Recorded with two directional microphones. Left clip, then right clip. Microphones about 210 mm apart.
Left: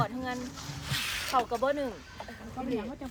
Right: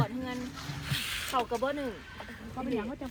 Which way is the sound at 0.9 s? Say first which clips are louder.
Left 2 dB; 30° left (ahead or behind).